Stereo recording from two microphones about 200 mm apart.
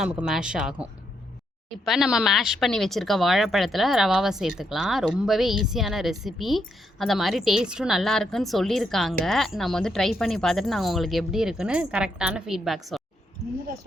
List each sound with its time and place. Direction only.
0.0 s speech: 5° right (ahead or behind)